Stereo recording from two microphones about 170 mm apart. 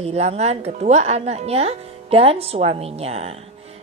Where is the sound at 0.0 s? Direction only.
40° right (ahead or behind).